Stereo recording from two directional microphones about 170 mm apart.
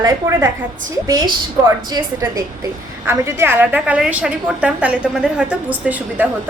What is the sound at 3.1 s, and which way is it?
A woman's voice, 15° right (ahead or behind).